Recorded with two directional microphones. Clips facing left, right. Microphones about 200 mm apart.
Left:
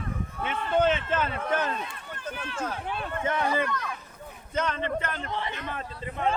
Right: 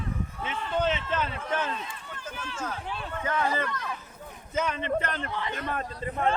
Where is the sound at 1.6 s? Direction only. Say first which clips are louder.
Left 2 dB; 55° left (ahead or behind).